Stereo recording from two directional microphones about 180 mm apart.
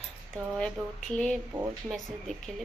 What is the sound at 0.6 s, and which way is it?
A woman's voice, 5° left (ahead or behind).